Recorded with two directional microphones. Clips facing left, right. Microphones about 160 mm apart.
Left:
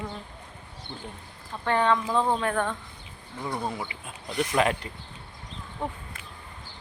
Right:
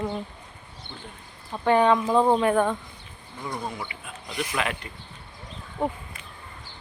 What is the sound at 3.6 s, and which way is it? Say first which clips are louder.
Speech: left 2 dB; 30° left (ahead or behind).